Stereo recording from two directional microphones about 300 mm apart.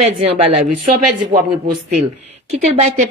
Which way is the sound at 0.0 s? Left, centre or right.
Centre.